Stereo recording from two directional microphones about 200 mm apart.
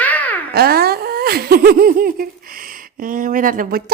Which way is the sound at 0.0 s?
10° left (ahead or behind).